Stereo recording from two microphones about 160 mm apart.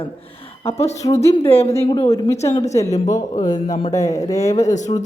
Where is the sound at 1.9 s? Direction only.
25° left (ahead or behind).